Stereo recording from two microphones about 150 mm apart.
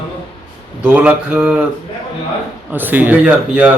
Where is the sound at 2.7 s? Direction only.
10° right (ahead or behind).